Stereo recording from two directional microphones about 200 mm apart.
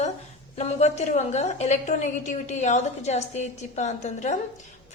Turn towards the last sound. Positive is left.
turn(degrees=35)  # may be behind; listen again after turning